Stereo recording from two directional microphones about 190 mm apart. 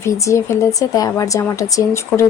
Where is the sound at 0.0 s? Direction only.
15° left (ahead or behind).